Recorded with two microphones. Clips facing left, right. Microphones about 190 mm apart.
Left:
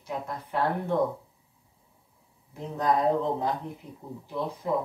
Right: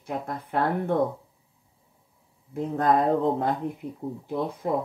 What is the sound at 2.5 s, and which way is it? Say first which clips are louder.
Speech: right 4 dB; 55° right (ahead or behind).